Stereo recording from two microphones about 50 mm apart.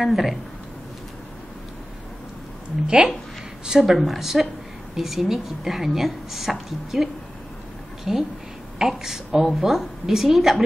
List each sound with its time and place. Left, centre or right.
0.0 s a woman's voice: centre
2.9 s a woman's voice: centre